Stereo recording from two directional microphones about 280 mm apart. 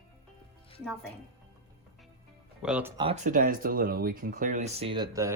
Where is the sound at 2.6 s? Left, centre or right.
Centre.